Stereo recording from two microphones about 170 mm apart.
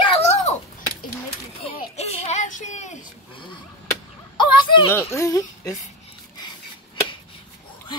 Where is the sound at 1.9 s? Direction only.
40° left (ahead or behind).